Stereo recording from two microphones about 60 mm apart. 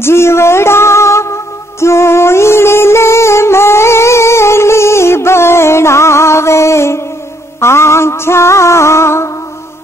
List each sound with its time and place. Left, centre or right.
0.0 s music: left